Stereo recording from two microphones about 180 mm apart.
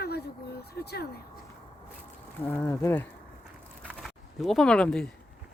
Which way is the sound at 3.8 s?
Centre (ahead or behind).